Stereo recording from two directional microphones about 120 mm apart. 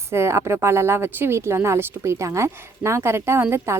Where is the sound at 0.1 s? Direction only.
20° right (ahead or behind).